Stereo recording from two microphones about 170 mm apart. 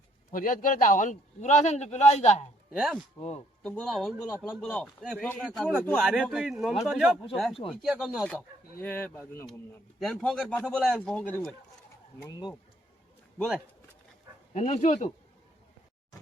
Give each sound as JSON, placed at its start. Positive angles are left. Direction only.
{"t": 0.3, "sound": "a man's voice", "side_deg": 55}
{"t": 2.7, "sound": "speech", "side_deg": 0}
{"t": 3.2, "sound": "speech", "side_deg": 40}
{"t": 3.6, "sound": "speech", "side_deg": 5}
{"t": 6.1, "sound": "speech", "side_deg": -5}
{"t": 8.8, "sound": "speech", "side_deg": 10}
{"t": 10.0, "sound": "speech", "side_deg": 0}
{"t": 14.5, "sound": "a man's voice", "side_deg": 45}